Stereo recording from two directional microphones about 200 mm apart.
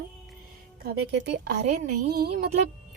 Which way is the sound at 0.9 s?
60° right (ahead or behind).